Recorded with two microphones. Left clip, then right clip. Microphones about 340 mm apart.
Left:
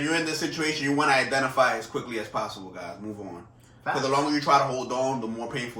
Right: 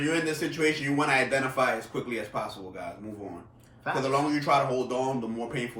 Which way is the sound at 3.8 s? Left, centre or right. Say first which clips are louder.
Left 2 dB; centre.